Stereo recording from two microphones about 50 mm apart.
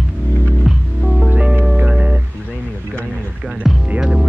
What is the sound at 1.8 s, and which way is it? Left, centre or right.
Music, right.